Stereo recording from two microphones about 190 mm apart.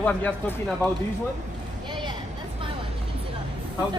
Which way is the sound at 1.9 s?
25° right (ahead or behind).